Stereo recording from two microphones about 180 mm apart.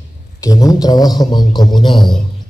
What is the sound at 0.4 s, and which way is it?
A man's voice, 20° left (ahead or behind).